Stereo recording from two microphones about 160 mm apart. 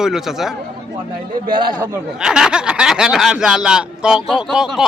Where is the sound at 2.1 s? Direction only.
5° right (ahead or behind).